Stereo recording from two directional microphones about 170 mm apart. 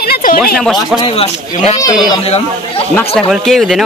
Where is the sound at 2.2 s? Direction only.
35° left (ahead or behind).